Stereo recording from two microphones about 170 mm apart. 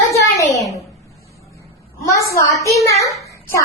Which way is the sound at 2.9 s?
20° left (ahead or behind).